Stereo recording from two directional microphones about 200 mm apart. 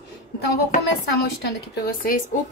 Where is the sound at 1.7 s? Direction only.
50° left (ahead or behind).